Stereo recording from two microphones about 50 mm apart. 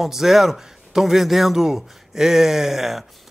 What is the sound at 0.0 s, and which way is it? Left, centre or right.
A man's voice, centre.